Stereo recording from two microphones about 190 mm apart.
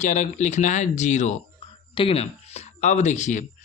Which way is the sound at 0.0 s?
40° left (ahead or behind).